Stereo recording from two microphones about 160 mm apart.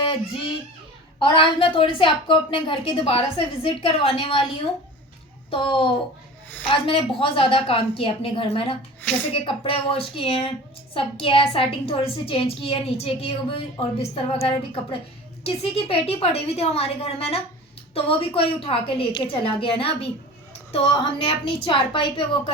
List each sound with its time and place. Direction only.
0.0 s a child's voice: 35° left (ahead or behind)
9.0 s a woman's voice: 10° left (ahead or behind)
9.3 s a woman's voice: 35° left (ahead or behind)